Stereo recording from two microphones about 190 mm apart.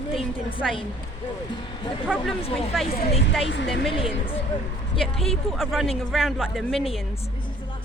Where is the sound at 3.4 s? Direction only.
70° left (ahead or behind).